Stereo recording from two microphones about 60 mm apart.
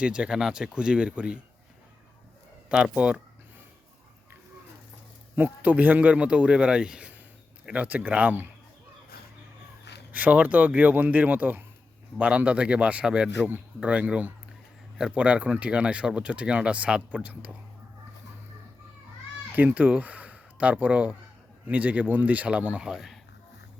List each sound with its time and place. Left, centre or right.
0.0 s speech: centre
2.6 s speech: centre
5.4 s speech: right
10.1 s speech: right
19.5 s speech: right